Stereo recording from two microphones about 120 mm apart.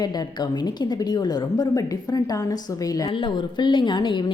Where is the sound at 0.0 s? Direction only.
35° left (ahead or behind).